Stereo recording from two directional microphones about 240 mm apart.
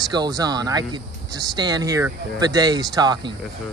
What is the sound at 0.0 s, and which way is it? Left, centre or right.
Speech, centre.